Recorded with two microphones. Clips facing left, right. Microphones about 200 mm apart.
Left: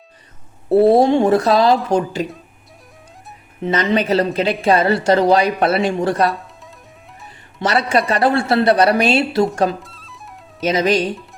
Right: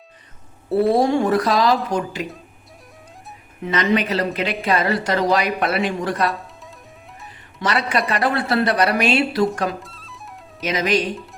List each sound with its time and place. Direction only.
0.7 s a woman's voice: 25° left (ahead or behind)
3.6 s a woman's voice: 30° left (ahead or behind)
7.6 s a woman's voice: 30° left (ahead or behind)
9.8 s music: centre (ahead or behind)
10.6 s a woman's voice: 30° left (ahead or behind)